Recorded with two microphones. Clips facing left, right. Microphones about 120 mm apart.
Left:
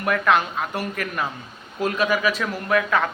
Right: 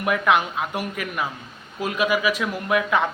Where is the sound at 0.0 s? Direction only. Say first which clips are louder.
Even; 15° right (ahead or behind).